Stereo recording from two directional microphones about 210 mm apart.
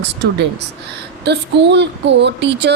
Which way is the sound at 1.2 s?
55° right (ahead or behind).